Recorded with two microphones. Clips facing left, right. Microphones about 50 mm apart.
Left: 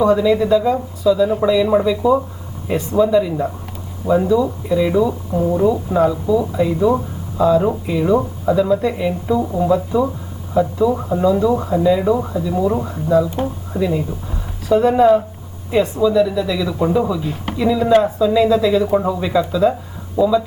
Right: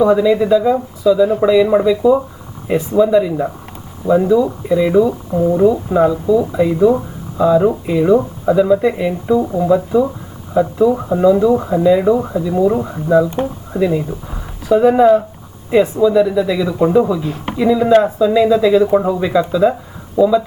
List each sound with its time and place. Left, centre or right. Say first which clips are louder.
0.0 s speech: right 2 dB; centre